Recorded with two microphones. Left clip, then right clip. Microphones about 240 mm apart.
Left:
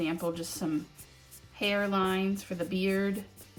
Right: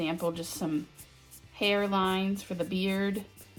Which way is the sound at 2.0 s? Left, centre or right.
Centre.